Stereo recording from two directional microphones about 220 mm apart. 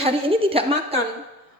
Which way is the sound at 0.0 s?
25° right (ahead or behind).